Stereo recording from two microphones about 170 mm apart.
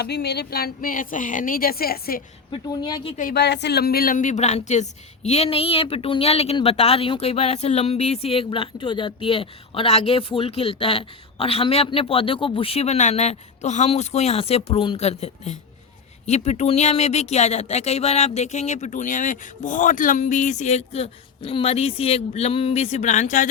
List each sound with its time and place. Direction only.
0.0 s a woman's voice: 75° left (ahead or behind)
2.5 s a woman's voice: 25° left (ahead or behind)
3.3 s a woman's voice: 80° left; by 23.5 s 45° left (ahead or behind)